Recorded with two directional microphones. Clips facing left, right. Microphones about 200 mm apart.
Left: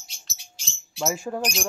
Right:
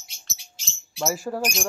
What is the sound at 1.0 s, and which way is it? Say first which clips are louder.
Speech: right 1 dB; 5° right (ahead or behind).